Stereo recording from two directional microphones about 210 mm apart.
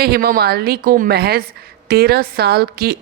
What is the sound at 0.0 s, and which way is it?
A woman's voice, 45° right (ahead or behind).